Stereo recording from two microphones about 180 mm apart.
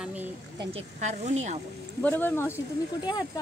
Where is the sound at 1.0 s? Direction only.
40° right (ahead or behind).